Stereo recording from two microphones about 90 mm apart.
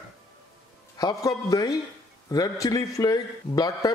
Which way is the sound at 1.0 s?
45° left (ahead or behind).